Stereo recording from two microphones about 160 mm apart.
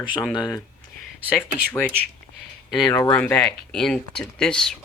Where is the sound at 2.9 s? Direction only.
15° left (ahead or behind).